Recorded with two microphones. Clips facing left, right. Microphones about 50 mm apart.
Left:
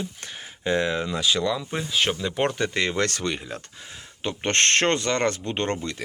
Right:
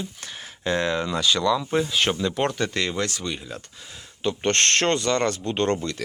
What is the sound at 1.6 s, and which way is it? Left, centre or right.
Speech, centre.